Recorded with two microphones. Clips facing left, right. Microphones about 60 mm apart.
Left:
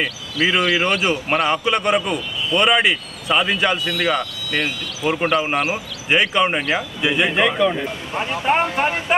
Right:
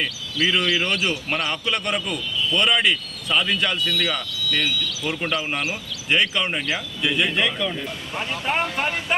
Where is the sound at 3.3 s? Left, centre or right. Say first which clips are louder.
Left 4 dB; centre.